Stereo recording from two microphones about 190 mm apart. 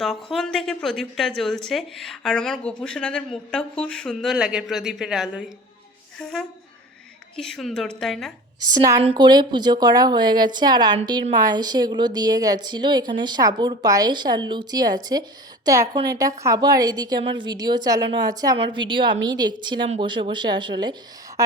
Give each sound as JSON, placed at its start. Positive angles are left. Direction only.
{"t": 0.0, "sound": "speech", "side_deg": 0}
{"t": 8.7, "sound": "a woman's voice", "side_deg": -15}